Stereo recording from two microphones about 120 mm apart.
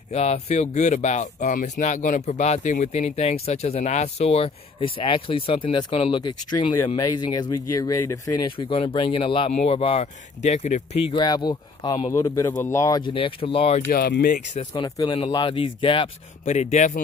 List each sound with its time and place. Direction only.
0.1 s speech: 65° left (ahead or behind)
6.2 s speech: 35° left (ahead or behind)
7.5 s a man's voice: 30° left (ahead or behind)
8.4 s speech: 45° left (ahead or behind)
9.5 s speech: 80° left
9.8 s speech: 50° left (ahead or behind)
10.4 s speech: 70° left (ahead or behind)
11.1 s speech: 35° left (ahead or behind)
12.1 s a man's voice: 25° left (ahead or behind)
13.0 s speech: 50° left (ahead or behind)
14.3 s speech: 90° left
14.7 s speech: 35° left (ahead or behind)
15.3 s speech: 45° left (ahead or behind)
16.4 s speech: 75° left (ahead or behind)